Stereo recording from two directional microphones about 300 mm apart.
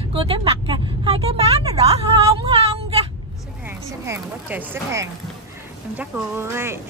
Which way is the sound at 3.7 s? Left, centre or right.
Centre.